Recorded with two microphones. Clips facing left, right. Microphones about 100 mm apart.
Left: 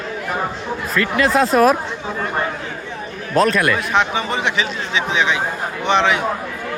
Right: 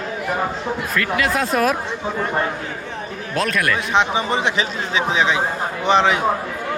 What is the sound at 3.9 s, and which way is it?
Speech, 25° right (ahead or behind).